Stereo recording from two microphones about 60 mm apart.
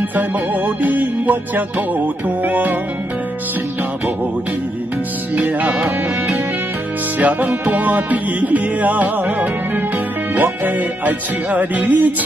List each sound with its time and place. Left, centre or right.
0.1 s music: right
5.3 s music: right